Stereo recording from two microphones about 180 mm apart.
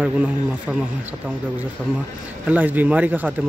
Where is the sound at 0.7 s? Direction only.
5° right (ahead or behind).